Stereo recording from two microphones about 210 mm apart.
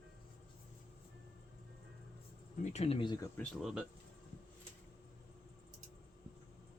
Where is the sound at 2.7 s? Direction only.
30° left (ahead or behind).